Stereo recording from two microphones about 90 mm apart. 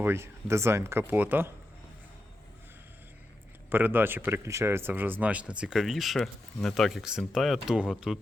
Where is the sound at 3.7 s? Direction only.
20° right (ahead or behind).